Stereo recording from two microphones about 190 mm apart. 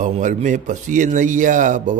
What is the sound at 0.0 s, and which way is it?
A man's voice, 40° right (ahead or behind).